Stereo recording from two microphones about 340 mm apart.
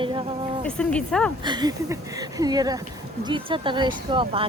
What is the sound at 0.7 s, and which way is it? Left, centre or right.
Speech, centre.